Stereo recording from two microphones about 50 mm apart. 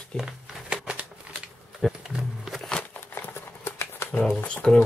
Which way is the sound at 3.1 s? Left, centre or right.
Left.